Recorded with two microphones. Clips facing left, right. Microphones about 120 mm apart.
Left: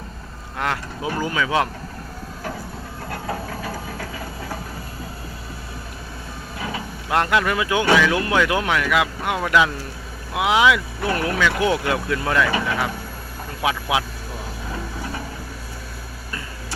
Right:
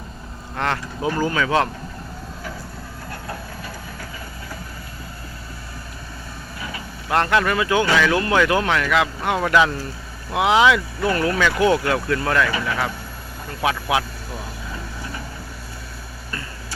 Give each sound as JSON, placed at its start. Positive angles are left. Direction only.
{"t": 0.5, "sound": "speech", "side_deg": 5}
{"t": 3.1, "sound": "a sound", "side_deg": 90}
{"t": 7.1, "sound": "speech", "side_deg": 10}
{"t": 13.6, "sound": "speech", "side_deg": 10}